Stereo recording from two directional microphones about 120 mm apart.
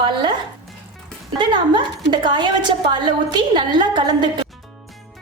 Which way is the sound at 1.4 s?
40° right (ahead or behind).